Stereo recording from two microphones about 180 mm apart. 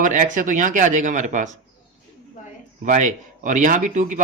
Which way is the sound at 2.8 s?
45° right (ahead or behind).